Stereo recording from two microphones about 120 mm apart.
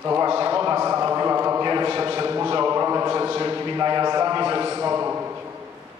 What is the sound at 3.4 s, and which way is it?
Speech, 25° right (ahead or behind).